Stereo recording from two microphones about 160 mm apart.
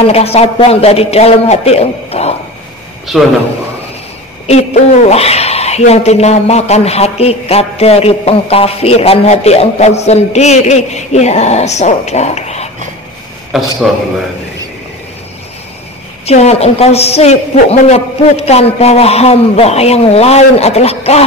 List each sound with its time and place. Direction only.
0.0 s speech: 40° left (ahead or behind)
3.1 s a man's voice: 5° right (ahead or behind)
4.5 s speech: 45° left (ahead or behind)
13.5 s a man's voice: centre (ahead or behind)
16.3 s speech: 40° left (ahead or behind)